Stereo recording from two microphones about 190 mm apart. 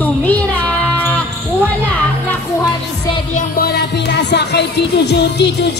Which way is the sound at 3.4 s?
55° left (ahead or behind).